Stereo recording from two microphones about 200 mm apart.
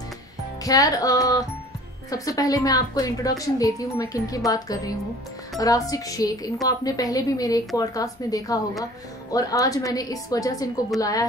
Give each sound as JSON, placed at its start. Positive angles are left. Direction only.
{"t": 0.7, "sound": "a woman's voice", "side_deg": 15}